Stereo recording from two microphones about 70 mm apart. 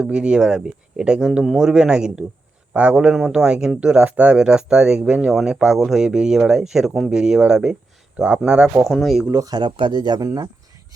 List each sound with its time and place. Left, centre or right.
0.0 s speech: centre
8.9 s speech: centre
9.4 s speech: right
10.2 s speech: right